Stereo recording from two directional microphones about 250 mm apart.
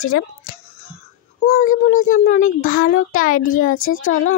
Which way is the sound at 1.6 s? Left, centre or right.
Left.